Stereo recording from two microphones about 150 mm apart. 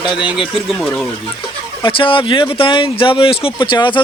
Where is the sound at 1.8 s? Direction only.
35° left (ahead or behind).